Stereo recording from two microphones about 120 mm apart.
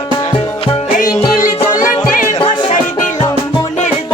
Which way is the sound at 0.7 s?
35° left (ahead or behind).